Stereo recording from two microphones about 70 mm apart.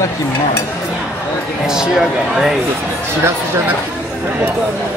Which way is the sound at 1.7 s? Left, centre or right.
Centre.